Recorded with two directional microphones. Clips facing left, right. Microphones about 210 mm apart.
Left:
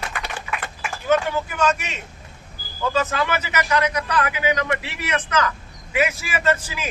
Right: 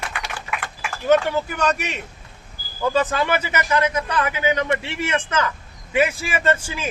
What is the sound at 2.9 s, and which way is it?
A man's voice, 30° right (ahead or behind).